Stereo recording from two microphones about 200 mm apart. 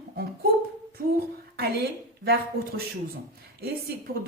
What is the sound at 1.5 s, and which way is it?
A woman's voice, 55° right (ahead or behind).